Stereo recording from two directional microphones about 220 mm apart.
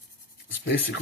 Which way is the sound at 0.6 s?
50° left (ahead or behind).